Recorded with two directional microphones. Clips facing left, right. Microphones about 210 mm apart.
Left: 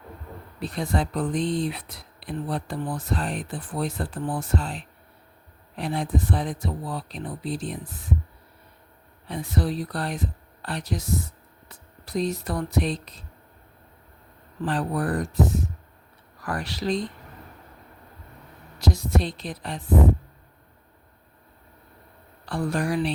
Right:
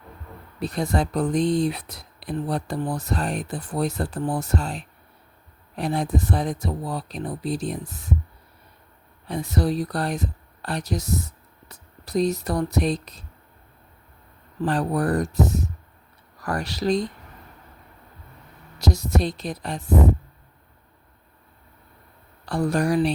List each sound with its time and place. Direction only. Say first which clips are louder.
0.6 s speech: right 3 dB; 40° right (ahead or behind)
9.2 s speech: right 3 dB; 40° right (ahead or behind)
14.6 s speech: right 3 dB; 40° right (ahead or behind)
18.8 s a woman's voice: right 1 dB; 40° right (ahead or behind)
22.4 s speech: right 4 dB; 40° right (ahead or behind)